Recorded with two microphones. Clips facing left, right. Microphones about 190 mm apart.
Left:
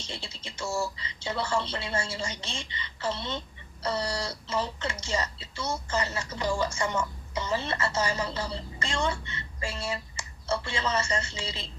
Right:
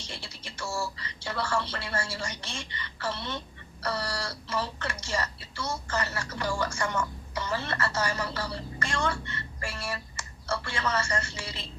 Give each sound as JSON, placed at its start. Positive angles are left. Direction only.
{"t": 0.0, "sound": "a woman's voice", "side_deg": 20}